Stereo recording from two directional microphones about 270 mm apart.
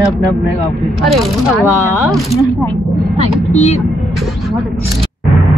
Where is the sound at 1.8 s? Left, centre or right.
Centre.